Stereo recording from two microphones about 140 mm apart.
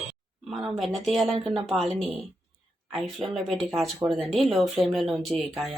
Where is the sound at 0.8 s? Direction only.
Centre (ahead or behind).